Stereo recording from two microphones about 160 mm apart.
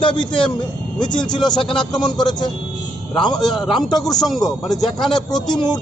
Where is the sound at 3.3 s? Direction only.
Centre (ahead or behind).